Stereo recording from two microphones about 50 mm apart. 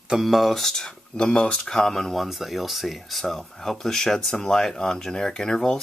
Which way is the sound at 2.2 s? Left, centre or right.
Centre.